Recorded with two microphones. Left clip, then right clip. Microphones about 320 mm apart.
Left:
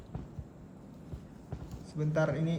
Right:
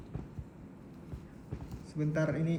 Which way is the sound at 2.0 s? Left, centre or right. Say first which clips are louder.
Left 2 dB; centre.